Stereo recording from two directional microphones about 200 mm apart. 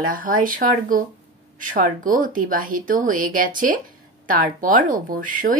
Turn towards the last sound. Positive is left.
turn(degrees=-45)  # may be behind; listen again after turning